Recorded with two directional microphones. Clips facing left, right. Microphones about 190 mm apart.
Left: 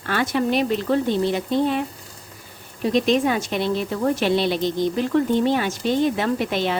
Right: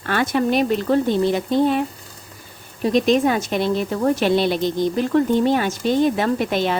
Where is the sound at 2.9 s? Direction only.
45° right (ahead or behind).